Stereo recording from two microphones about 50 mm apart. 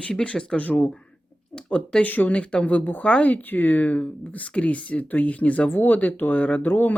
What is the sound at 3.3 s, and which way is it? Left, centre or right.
Speech, left.